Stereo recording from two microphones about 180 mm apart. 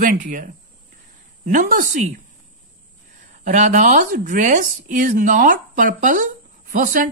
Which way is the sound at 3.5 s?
40° right (ahead or behind).